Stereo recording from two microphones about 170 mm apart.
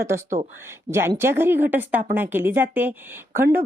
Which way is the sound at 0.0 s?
15° right (ahead or behind).